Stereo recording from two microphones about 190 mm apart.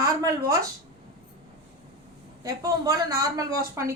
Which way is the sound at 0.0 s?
20° right (ahead or behind).